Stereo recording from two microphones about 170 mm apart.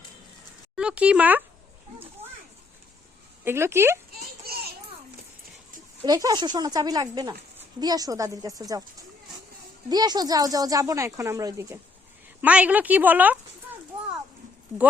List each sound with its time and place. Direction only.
0.8 s speech: 5° right (ahead or behind)
3.4 s speech: 15° right (ahead or behind)
4.4 s children playing: 65° right (ahead or behind)
6.0 s speech: 20° right (ahead or behind)
12.4 s speech: 10° right (ahead or behind)